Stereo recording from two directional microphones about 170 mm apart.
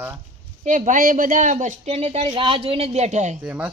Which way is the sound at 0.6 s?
50° right (ahead or behind).